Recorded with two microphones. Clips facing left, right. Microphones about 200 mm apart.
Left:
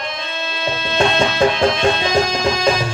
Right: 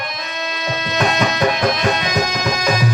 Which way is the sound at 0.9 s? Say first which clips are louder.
Left 2 dB; 30° left (ahead or behind).